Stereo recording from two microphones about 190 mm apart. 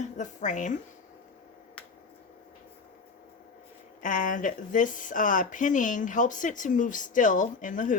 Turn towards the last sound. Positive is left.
turn(degrees=40)  # may be behind; listen again after turning